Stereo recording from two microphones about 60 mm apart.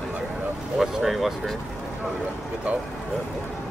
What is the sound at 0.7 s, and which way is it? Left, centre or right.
Speech, centre.